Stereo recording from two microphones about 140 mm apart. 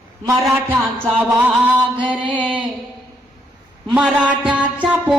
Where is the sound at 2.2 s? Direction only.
10° left (ahead or behind).